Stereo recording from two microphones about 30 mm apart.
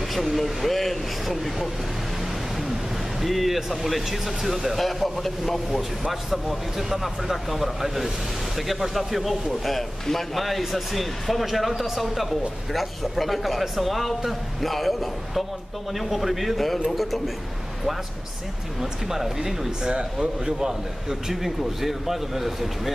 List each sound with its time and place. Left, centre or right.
0.4 s speech: centre
3.2 s speech: centre
18.8 s speech: centre
19.8 s a man's voice: right
20.2 s a man's voice: centre
21.3 s speech: centre